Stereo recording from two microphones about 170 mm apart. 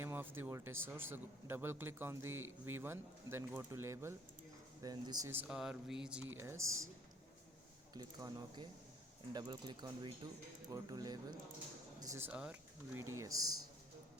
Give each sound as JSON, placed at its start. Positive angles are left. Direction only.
{"t": 0.0, "sound": "speech", "side_deg": -10}
{"t": 5.3, "sound": "speech", "side_deg": -10}
{"t": 6.3, "sound": "speech", "side_deg": -15}
{"t": 7.9, "sound": "speech", "side_deg": -25}